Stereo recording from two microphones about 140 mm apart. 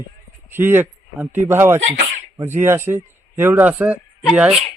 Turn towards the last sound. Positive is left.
turn(degrees=-5)  # may be behind; listen again after turning